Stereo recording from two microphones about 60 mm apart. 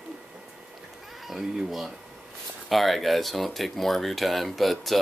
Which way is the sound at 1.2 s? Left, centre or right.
Centre.